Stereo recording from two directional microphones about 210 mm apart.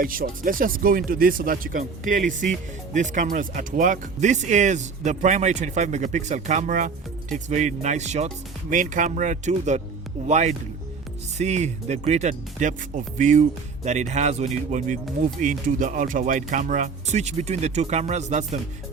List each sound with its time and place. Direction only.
0.0 s speech: 40° right (ahead or behind)